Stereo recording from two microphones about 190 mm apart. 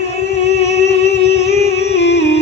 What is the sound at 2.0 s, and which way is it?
Music, 65° left (ahead or behind).